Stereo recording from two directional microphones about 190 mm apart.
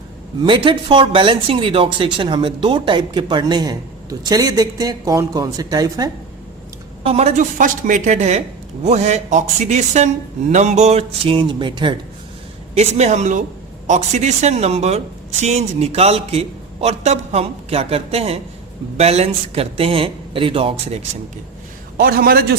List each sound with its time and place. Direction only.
0.4 s speech: 25° right (ahead or behind)
7.0 s speech: 30° right (ahead or behind)
12.7 s speech: 35° right (ahead or behind)
21.9 s a man's voice: 50° right (ahead or behind)